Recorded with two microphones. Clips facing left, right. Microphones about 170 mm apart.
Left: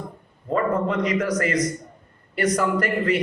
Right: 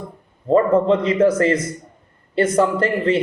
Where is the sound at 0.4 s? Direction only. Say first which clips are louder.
Right 8 dB; 25° right (ahead or behind).